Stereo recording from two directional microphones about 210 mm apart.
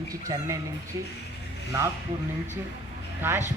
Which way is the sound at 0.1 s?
15° right (ahead or behind).